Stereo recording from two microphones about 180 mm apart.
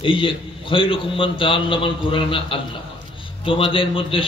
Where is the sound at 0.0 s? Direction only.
30° left (ahead or behind).